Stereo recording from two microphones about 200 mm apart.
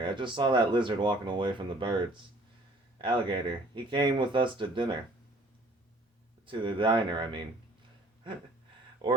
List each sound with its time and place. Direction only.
0.0 s speech: 25° right (ahead or behind)
3.0 s speech: 25° right (ahead or behind)
6.4 s speech: 25° right (ahead or behind)
9.0 s speech: 25° right (ahead or behind)